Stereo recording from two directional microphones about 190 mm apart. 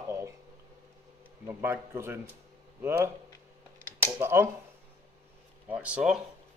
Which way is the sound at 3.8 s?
10° left (ahead or behind).